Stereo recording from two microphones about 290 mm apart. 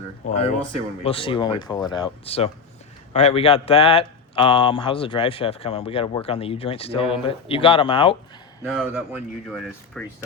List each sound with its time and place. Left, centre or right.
1.0 s speech: centre
8.6 s speech: centre